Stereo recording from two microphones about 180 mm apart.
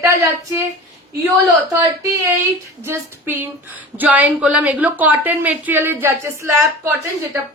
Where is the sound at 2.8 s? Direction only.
15° right (ahead or behind).